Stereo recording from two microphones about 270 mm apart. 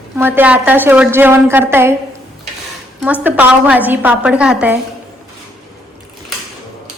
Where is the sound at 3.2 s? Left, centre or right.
Centre.